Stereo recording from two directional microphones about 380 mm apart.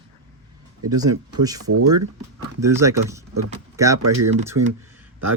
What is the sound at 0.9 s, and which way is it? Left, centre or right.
Speech, centre.